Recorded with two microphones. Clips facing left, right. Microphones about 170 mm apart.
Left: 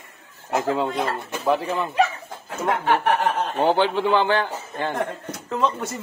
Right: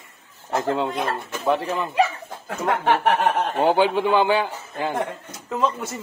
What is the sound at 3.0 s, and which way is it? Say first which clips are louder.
Snicker: right 1 dB; 70° right (ahead or behind).